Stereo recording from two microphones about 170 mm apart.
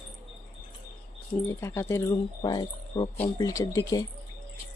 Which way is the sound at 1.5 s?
15° left (ahead or behind).